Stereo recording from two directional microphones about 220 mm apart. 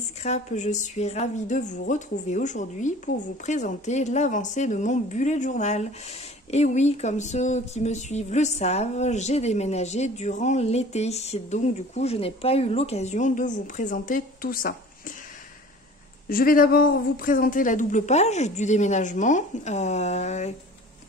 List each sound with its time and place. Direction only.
0.2 s a woman's voice: 30° left (ahead or behind)
16.3 s a woman's voice: 40° left (ahead or behind)